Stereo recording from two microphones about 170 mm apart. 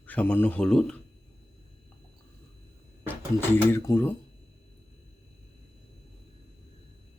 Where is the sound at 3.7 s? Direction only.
15° left (ahead or behind).